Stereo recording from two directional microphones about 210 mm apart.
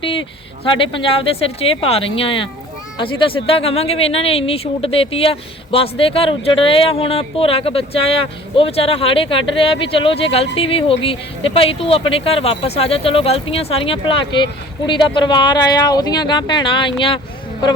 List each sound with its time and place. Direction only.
0.0 s speech: 25° left (ahead or behind)